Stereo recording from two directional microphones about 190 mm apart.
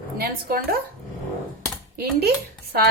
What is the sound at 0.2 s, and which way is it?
Speech, 50° right (ahead or behind).